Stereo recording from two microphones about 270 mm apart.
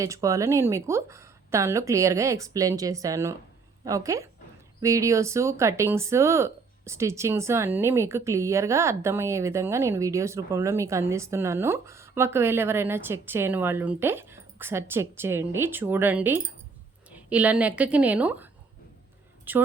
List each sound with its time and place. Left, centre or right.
0.0 s speech: centre